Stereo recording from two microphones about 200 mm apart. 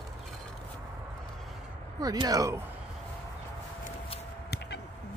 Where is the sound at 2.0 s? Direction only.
20° right (ahead or behind).